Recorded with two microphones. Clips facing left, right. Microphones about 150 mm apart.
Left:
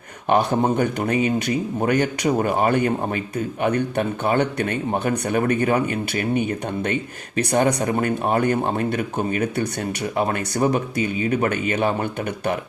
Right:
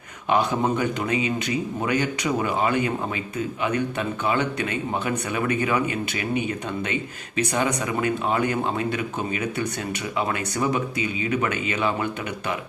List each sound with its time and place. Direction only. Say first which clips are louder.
0.8 s a man's voice: left 4 dB; 50° left (ahead or behind)